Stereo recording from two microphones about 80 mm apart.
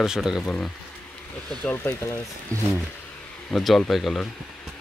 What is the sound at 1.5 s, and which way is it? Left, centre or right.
Speech, centre.